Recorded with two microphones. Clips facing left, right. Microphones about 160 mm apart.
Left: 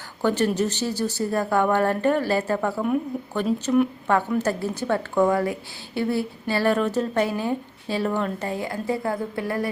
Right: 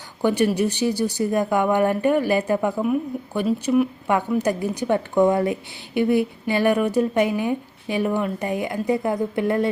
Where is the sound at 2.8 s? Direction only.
5° right (ahead or behind).